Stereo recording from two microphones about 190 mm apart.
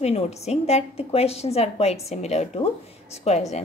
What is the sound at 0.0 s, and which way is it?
A woman's voice, 35° left (ahead or behind).